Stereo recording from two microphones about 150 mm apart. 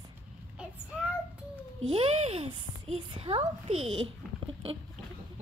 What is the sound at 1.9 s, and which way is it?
A child's voice, 40° right (ahead or behind).